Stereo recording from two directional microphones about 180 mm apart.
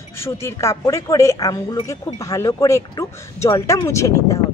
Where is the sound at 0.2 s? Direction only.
15° left (ahead or behind).